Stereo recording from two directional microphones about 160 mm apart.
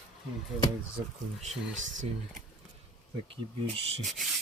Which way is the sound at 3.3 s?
35° right (ahead or behind).